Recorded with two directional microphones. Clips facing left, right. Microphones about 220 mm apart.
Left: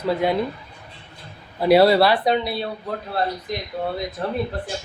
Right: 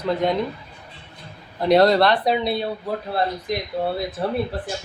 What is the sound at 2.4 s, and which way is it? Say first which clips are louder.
Speech: right 3 dB; 25° right (ahead or behind).